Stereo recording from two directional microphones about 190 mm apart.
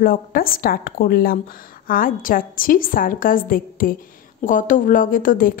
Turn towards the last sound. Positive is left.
turn(degrees=45)  # may be behind; listen again after turning